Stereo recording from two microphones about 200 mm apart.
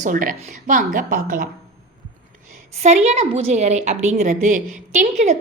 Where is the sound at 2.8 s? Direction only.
35° right (ahead or behind).